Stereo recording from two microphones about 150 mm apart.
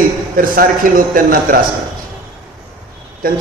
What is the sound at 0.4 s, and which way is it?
A man's voice, 70° right (ahead or behind).